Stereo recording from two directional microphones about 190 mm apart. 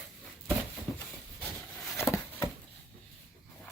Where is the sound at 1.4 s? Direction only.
5° left (ahead or behind).